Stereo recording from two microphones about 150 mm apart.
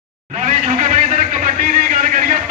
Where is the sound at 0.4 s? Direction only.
55° right (ahead or behind).